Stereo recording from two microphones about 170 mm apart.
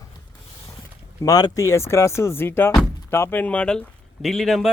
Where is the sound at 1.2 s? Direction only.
20° left (ahead or behind).